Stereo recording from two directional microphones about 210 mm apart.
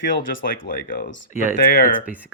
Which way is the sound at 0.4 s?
45° left (ahead or behind).